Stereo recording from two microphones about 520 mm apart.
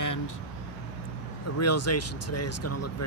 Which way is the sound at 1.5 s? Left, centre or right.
Left.